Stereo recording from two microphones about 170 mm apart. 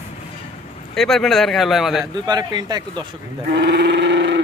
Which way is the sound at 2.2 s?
25° right (ahead or behind).